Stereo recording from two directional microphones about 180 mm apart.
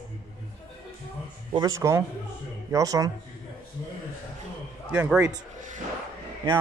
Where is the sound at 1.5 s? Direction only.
20° right (ahead or behind).